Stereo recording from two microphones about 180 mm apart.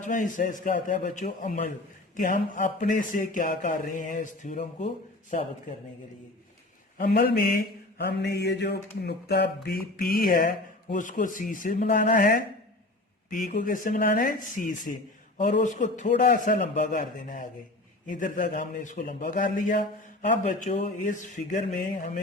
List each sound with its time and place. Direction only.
0.0 s speech: 45° left (ahead or behind)
7.0 s mantra: 55° left (ahead or behind)
10.9 s speech: 45° left (ahead or behind)